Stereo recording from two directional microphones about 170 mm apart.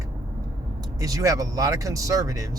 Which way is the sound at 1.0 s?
20° right (ahead or behind).